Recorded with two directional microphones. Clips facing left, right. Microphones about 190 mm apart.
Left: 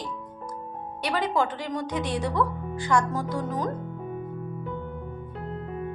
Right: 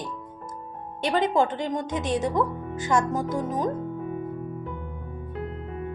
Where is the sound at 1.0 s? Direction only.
25° right (ahead or behind).